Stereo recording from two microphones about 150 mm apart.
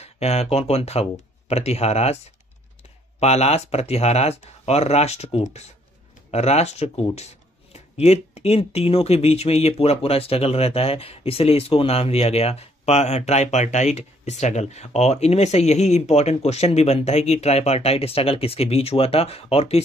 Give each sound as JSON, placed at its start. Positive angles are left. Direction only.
{"t": 0.0, "sound": "speech", "side_deg": 45}
{"t": 3.2, "sound": "speech", "side_deg": 45}